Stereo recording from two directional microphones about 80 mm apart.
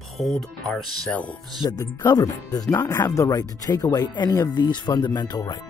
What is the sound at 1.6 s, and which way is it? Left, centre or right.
Speech, left.